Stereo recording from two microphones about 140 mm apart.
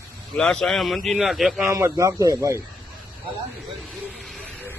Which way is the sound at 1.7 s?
20° right (ahead or behind).